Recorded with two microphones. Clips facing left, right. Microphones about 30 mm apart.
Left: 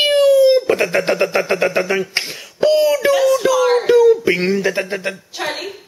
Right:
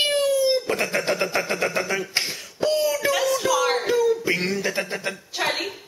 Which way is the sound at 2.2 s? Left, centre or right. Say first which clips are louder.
Left 2 dB; centre.